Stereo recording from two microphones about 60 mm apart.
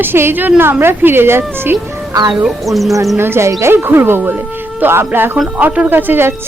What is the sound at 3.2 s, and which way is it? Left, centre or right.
A woman's voice, right.